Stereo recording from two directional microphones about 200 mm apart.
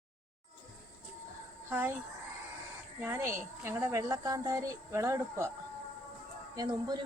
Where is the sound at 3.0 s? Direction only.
15° right (ahead or behind).